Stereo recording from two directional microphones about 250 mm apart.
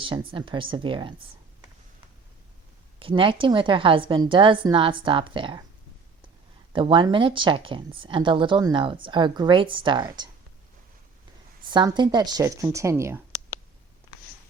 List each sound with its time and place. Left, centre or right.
0.0 s a woman's voice: centre
3.0 s a woman's voice: right
6.7 s a woman's voice: centre
11.7 s a woman's voice: centre